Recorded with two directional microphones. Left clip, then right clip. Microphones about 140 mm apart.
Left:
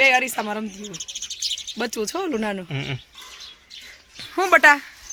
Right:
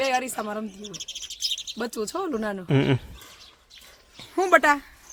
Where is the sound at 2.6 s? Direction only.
90° right.